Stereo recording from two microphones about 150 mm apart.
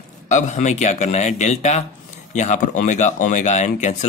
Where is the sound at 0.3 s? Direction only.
55° left (ahead or behind).